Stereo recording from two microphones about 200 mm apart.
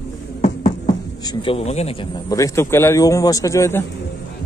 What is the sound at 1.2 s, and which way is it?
Speech, 25° left (ahead or behind).